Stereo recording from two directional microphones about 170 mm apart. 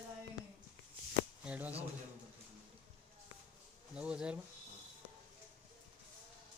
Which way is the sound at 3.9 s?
5° right (ahead or behind).